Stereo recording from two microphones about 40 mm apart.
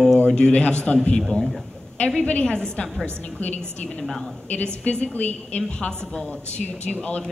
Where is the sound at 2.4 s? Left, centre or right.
Left.